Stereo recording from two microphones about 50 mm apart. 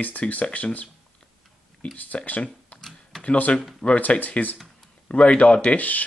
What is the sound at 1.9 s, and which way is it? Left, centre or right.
Speech, left.